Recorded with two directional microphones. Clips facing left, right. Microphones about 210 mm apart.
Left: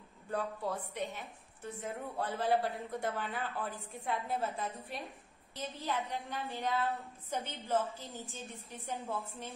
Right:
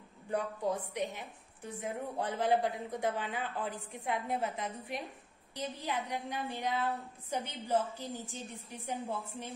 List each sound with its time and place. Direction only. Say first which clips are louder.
0.3 s a woman's voice: right 3 dB; 15° right (ahead or behind)